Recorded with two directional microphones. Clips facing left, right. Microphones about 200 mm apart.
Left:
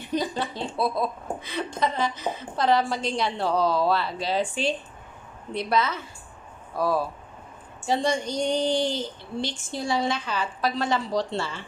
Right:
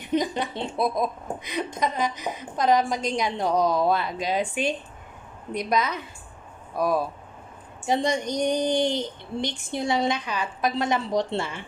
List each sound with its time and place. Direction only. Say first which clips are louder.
0.1 s a woman's voice: right 2 dB; 20° right (ahead or behind)